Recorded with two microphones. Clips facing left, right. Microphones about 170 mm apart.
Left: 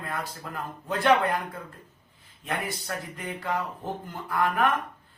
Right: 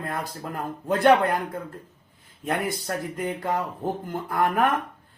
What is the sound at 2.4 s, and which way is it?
Speech, 45° right (ahead or behind).